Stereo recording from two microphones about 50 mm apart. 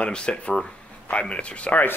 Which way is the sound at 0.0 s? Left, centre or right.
Left.